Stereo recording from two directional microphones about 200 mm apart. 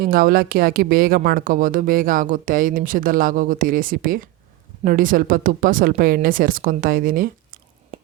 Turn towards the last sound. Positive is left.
turn(degrees=-45)  # may be behind; listen again after turning